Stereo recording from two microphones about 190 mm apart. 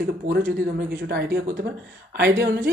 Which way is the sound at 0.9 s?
60° right (ahead or behind).